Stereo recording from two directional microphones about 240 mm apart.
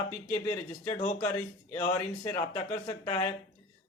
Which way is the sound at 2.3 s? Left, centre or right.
Left.